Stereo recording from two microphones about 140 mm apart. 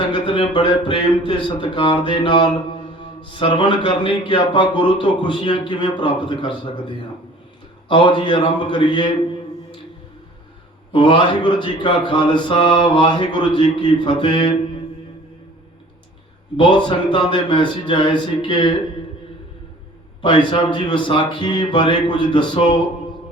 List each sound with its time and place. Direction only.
0.1 s a man's voice: 40° left (ahead or behind)
10.9 s a man's voice: 35° left (ahead or behind)
16.6 s a man's voice: 35° left (ahead or behind)
20.2 s a man's voice: 35° left (ahead or behind)